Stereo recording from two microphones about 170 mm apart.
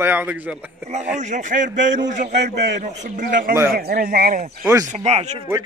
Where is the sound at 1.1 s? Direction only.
45° right (ahead or behind).